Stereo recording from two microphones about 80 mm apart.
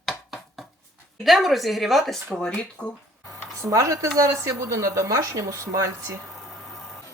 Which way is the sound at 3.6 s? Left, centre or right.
Right.